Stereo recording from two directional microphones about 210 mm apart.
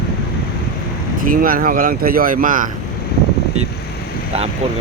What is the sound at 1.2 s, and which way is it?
Speech, 40° right (ahead or behind).